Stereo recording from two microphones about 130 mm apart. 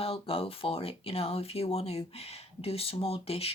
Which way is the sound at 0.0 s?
45° left (ahead or behind).